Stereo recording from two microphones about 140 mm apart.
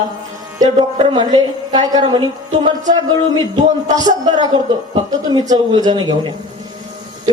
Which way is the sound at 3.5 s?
30° right (ahead or behind).